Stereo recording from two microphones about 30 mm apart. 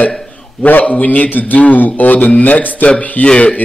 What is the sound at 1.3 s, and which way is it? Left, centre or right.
Speech, left.